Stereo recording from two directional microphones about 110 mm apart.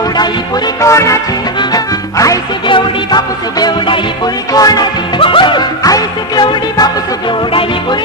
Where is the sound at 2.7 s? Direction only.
40° left (ahead or behind).